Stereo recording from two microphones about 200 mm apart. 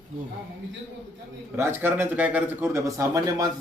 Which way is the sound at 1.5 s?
10° right (ahead or behind).